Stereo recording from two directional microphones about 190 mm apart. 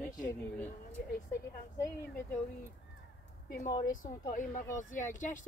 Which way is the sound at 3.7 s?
15° left (ahead or behind).